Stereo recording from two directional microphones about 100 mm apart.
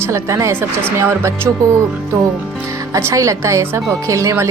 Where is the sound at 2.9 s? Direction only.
30° right (ahead or behind).